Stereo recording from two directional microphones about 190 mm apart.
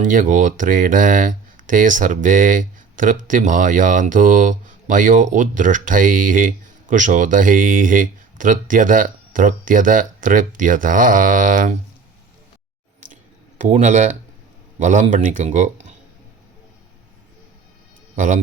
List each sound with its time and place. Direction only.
0.0 s speech: 45° right (ahead or behind)
13.6 s speech: 40° right (ahead or behind)